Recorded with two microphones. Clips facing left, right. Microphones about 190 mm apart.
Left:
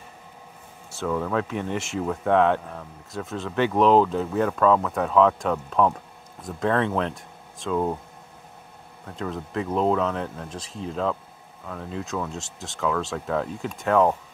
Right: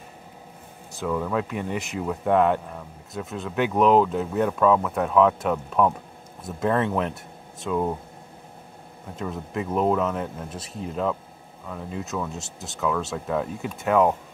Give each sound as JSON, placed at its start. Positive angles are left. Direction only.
{"t": 1.0, "sound": "speech", "side_deg": -5}
{"t": 9.0, "sound": "speech", "side_deg": -5}